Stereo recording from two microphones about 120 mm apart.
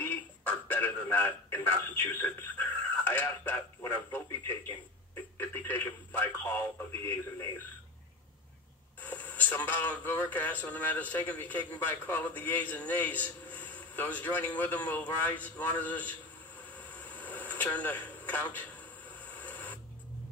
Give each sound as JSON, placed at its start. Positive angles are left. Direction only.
{"t": 0.0, "sound": "speech", "side_deg": 15}
{"t": 9.0, "sound": "speech", "side_deg": 15}
{"t": 16.7, "sound": "a sound", "side_deg": 15}
{"t": 17.7, "sound": "radio", "side_deg": 15}